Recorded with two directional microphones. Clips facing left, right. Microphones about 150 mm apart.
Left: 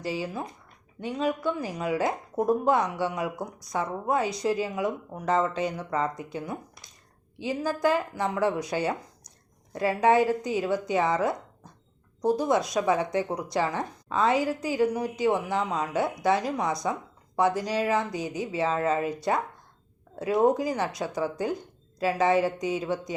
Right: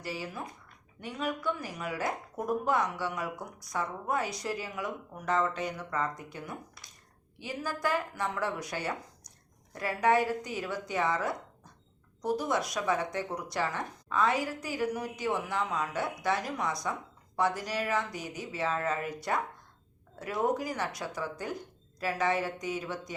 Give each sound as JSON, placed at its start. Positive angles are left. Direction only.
{"t": 0.0, "sound": "speech", "side_deg": 25}